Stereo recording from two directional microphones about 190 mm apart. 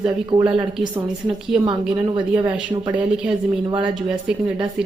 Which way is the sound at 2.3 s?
10° right (ahead or behind).